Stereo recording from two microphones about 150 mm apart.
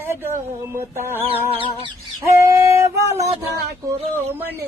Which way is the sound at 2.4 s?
20° right (ahead or behind).